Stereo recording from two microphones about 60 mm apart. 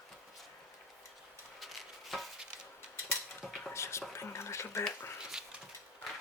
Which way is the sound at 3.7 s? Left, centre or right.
Left.